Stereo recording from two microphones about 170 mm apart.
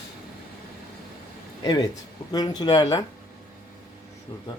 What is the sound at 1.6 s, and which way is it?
Speech, 25° left (ahead or behind).